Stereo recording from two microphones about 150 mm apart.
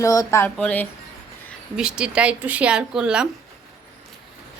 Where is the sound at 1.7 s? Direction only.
5° right (ahead or behind).